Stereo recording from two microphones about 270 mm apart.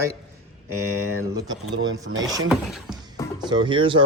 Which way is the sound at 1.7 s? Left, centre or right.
Right.